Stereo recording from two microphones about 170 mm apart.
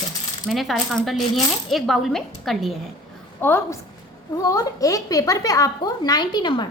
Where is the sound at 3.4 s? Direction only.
15° left (ahead or behind).